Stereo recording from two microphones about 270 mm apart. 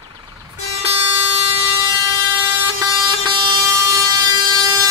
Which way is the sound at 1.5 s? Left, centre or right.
Centre.